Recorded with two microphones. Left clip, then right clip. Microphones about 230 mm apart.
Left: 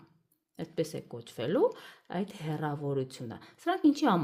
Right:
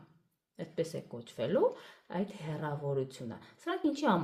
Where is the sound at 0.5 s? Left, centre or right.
Left.